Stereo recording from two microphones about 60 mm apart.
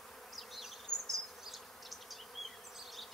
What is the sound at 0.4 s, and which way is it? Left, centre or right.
Bee, centre.